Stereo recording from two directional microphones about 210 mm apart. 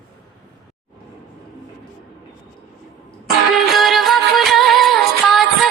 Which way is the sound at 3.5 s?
Centre (ahead or behind).